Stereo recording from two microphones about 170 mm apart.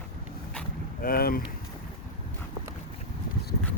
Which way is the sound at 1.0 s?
60° left (ahead or behind).